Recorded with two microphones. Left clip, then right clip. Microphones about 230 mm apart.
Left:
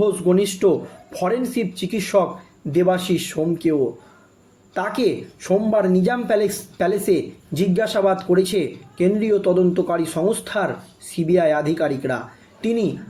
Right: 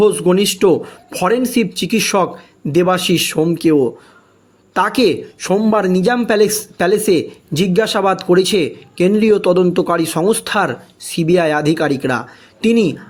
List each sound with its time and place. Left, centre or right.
0.0 s speech: right